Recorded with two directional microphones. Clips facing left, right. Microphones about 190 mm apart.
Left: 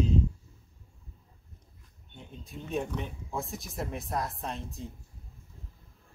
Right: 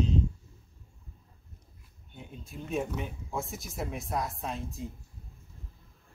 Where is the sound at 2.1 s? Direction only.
5° right (ahead or behind).